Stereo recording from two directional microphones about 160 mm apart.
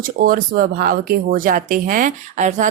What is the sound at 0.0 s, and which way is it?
Speech, 60° right (ahead or behind).